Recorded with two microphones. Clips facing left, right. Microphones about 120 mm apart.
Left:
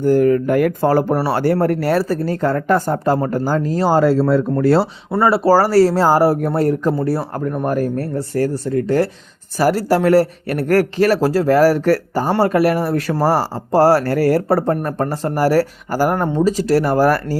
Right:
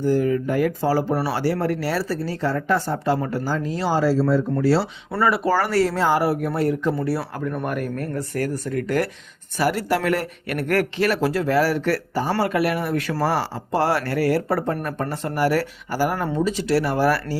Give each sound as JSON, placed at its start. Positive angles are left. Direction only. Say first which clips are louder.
{"t": 0.0, "sound": "speech", "louder": "left 6 dB", "side_deg": 55}
{"t": 5.2, "sound": "speech", "louder": "left 7 dB", "side_deg": 30}